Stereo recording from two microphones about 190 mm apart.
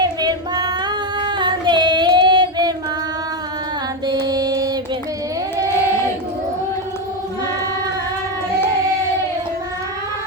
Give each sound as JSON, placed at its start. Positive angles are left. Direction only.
{"t": 0.0, "sound": "female singing", "side_deg": -20}
{"t": 4.0, "sound": "mantra", "side_deg": -20}